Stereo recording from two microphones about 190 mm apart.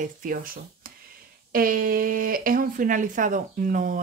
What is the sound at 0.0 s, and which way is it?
Speech, 45° right (ahead or behind).